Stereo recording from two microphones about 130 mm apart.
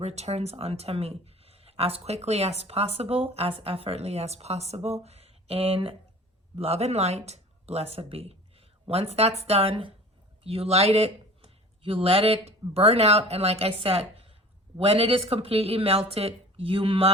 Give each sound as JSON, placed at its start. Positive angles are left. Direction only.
{"t": 0.0, "sound": "speech", "side_deg": -55}